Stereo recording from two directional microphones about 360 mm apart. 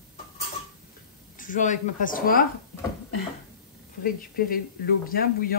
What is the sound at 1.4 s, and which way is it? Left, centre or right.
Speech, left.